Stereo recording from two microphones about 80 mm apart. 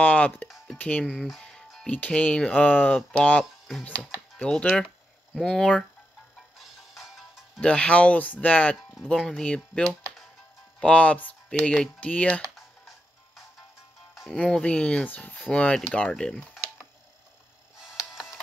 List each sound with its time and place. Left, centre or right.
0.0 s speech: centre
1.4 s music: centre
1.9 s speech: centre
6.9 s music: centre
7.6 s speech: centre
14.3 s speech: centre
16.3 s speech: centre